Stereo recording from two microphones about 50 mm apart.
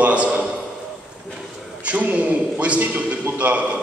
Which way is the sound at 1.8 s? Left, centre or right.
Right.